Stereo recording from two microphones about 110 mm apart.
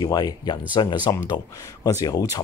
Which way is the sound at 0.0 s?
40° left (ahead or behind).